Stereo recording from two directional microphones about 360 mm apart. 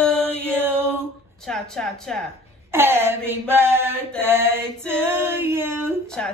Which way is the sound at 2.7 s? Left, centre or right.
Centre.